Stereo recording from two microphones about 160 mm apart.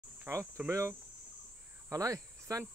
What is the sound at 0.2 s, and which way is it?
Cricket, 15° right (ahead or behind).